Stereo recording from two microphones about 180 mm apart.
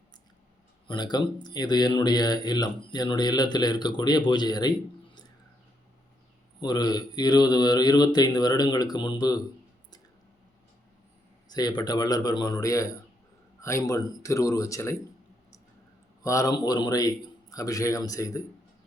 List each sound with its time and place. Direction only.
0.9 s speech: 25° left (ahead or behind)
6.6 s speech: 20° left (ahead or behind)
11.4 s speech: 20° left (ahead or behind)
16.2 s speech: 20° left (ahead or behind)